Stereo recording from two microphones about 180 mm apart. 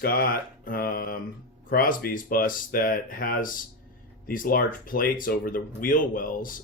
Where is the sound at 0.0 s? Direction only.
55° left (ahead or behind).